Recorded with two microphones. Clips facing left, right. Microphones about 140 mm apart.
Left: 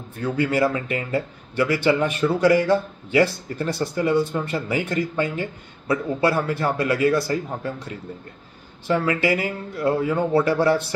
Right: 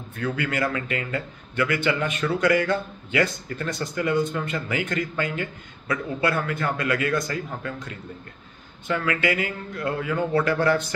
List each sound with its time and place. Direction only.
0.2 s speech: 30° left (ahead or behind)